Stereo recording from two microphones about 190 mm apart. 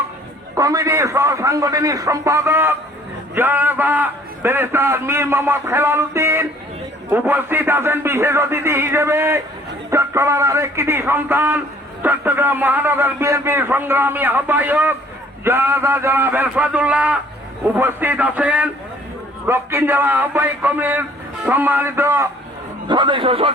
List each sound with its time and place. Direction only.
0.5 s a man's voice: 15° right (ahead or behind)
22.9 s a man's voice: 25° right (ahead or behind)